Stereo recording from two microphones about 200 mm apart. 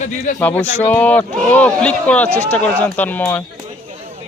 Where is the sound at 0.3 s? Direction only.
10° left (ahead or behind).